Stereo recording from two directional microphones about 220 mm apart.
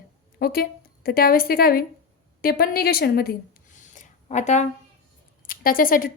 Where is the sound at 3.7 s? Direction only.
35° left (ahead or behind).